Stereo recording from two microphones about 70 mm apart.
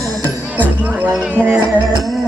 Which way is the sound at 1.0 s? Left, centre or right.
Right.